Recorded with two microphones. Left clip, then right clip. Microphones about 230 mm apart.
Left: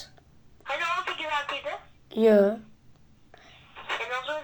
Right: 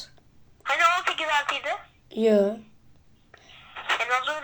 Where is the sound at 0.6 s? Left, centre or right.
Right.